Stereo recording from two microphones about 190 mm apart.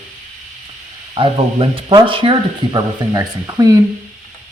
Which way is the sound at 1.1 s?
25° right (ahead or behind).